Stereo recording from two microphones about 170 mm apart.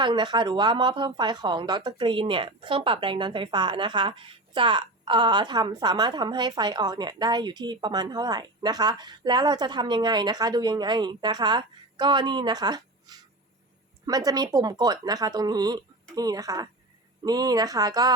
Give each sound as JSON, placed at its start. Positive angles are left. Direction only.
{"t": 0.0, "sound": "speech", "side_deg": -25}